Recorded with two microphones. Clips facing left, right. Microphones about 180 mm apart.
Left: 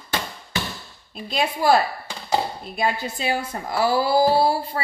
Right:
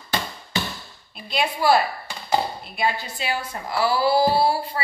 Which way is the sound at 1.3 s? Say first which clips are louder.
Left 1 dB; 40° left (ahead or behind).